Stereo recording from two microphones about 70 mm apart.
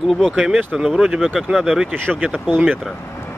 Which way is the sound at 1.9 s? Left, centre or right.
Right.